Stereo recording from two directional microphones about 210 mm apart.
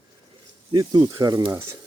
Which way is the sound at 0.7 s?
25° right (ahead or behind).